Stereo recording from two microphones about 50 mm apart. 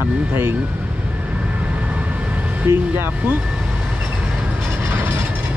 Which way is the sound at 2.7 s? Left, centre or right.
Right.